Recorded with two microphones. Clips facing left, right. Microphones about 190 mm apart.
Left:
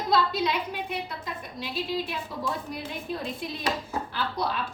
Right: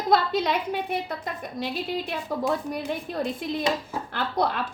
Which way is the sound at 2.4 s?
50° right (ahead or behind).